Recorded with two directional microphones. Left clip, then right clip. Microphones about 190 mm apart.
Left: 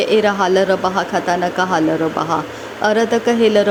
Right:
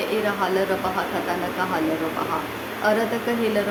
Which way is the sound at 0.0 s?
35° left (ahead or behind).